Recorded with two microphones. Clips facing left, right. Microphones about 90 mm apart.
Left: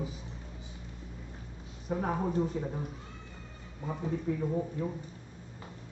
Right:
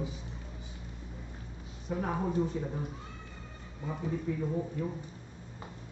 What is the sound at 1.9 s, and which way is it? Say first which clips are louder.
Speech: left 1 dB; 35° left (ahead or behind).